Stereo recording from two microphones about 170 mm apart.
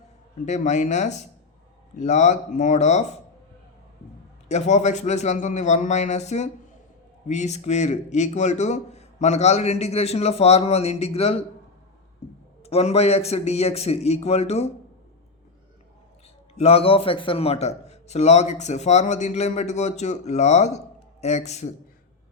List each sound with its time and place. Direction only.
0.4 s a man's voice: 45° left (ahead or behind)
4.4 s a man's voice: 40° left (ahead or behind)
12.6 s a man's voice: 35° left (ahead or behind)
16.6 s a man's voice: 35° left (ahead or behind)